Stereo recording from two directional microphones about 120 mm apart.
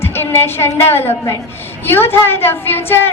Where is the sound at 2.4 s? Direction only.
20° left (ahead or behind).